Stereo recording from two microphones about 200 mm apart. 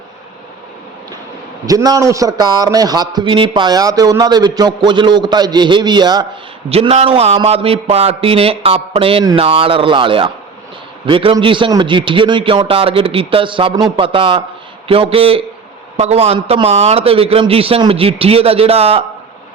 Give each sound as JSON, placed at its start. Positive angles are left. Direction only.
{"t": 1.6, "sound": "a man's voice", "side_deg": -20}